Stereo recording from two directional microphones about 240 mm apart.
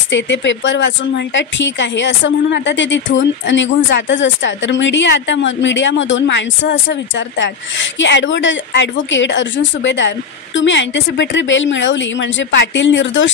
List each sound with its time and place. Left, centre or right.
0.1 s speech: left